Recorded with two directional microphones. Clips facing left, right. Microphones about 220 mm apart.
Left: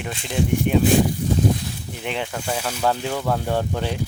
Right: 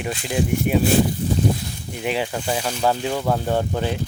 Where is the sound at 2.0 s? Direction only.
10° right (ahead or behind).